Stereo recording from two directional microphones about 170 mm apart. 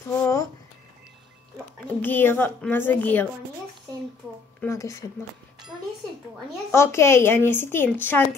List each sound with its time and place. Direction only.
0.1 s a sound: 15° left (ahead or behind)
2.0 s a woman's voice: 10° left (ahead or behind)
4.6 s a woman's voice: 15° left (ahead or behind)
6.7 s a woman's voice: 15° left (ahead or behind)